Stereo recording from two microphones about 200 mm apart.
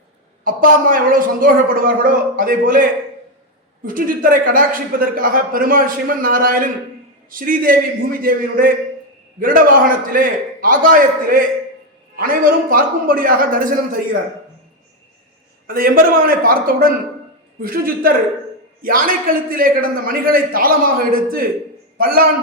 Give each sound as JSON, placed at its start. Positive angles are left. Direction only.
{"t": 0.4, "sound": "a man's voice", "side_deg": -45}
{"t": 3.8, "sound": "a man's voice", "side_deg": -45}
{"t": 15.6, "sound": "a man's voice", "side_deg": -45}